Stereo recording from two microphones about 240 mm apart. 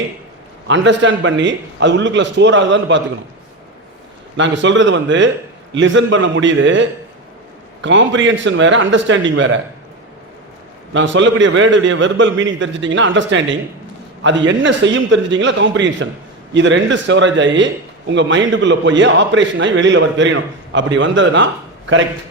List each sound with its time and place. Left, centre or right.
0.7 s a man's voice: right
4.4 s a man's voice: right
10.9 s a man's voice: right